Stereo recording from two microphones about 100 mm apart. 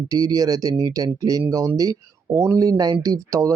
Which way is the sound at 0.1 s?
35° right (ahead or behind).